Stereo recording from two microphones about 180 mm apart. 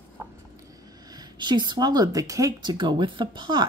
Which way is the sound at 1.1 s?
25° right (ahead or behind).